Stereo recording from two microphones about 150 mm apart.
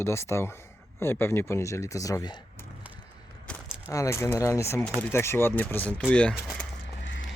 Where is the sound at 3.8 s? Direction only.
20° left (ahead or behind).